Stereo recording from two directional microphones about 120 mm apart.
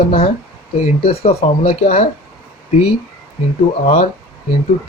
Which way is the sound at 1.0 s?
55° left (ahead or behind).